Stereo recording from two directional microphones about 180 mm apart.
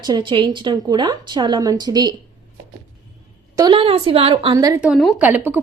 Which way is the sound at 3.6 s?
25° right (ahead or behind).